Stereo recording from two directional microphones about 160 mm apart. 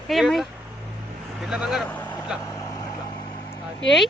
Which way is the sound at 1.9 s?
10° left (ahead or behind).